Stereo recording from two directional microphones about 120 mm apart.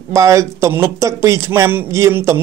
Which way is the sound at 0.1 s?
25° right (ahead or behind).